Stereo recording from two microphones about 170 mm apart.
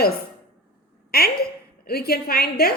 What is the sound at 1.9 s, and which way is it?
Speech, 65° left (ahead or behind).